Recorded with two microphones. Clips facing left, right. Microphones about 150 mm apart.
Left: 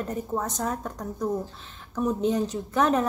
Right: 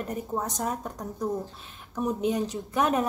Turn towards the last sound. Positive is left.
turn(degrees=-10)  # may be behind; listen again after turning